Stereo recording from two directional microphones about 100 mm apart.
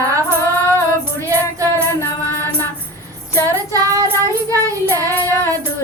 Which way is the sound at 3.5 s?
30° right (ahead or behind).